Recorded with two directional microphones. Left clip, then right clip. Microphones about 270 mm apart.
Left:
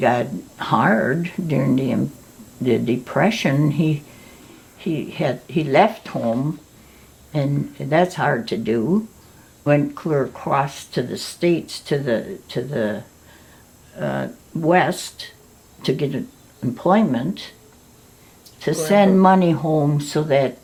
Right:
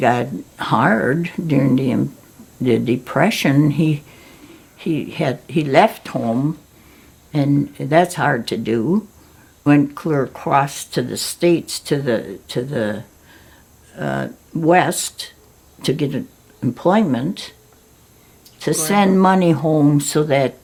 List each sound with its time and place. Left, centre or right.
0.0 s speech: right
7.3 s speech: right
18.6 s speech: right